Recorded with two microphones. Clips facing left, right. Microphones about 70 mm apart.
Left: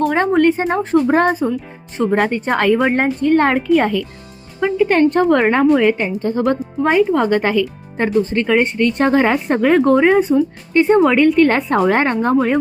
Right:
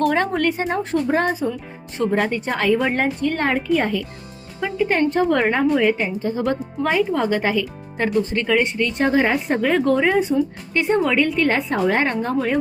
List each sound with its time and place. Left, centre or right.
0.3 s speech: left
1.1 s a woman's voice: left
2.9 s speech: left
3.4 s a woman's voice: left
7.9 s speech: left
9.5 s a woman's voice: left